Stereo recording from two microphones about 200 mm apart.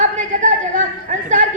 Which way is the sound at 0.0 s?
40° right (ahead or behind).